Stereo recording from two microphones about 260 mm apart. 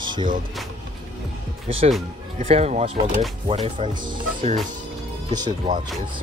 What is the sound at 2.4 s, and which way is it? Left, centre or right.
Speech, right.